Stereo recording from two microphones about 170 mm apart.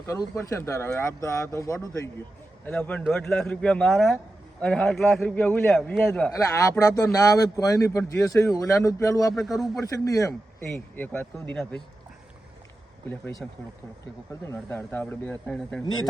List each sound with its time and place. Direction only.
0.0 s a man's voice: 15° left (ahead or behind)
6.4 s speech: 20° left (ahead or behind)
9.3 s a man's voice: centre (ahead or behind)
10.0 s speech: 20° left (ahead or behind)
13.4 s a man's voice: 5° left (ahead or behind)
14.4 s a man's voice: 15° left (ahead or behind)